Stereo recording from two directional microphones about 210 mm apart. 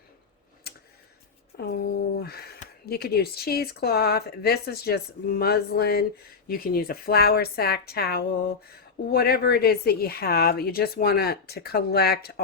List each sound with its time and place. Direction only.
1.5 s a woman's voice: 50° left (ahead or behind)